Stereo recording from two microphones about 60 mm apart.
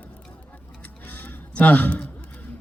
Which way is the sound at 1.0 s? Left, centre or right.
Left.